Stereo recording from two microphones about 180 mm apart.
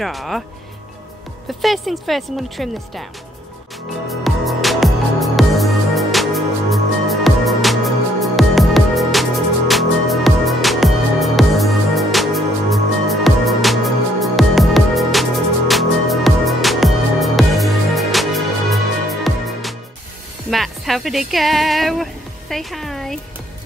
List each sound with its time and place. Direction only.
0.0 s a woman's voice: centre (ahead or behind)
1.6 s a woman's voice: centre (ahead or behind)
4.1 s music: centre (ahead or behind)
20.4 s music: centre (ahead or behind)